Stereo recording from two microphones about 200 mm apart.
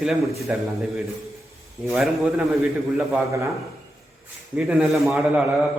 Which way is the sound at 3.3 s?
15° right (ahead or behind).